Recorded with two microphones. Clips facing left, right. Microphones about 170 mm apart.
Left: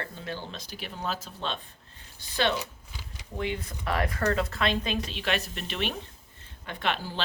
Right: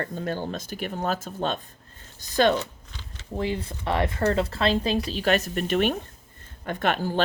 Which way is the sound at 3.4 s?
30° right (ahead or behind).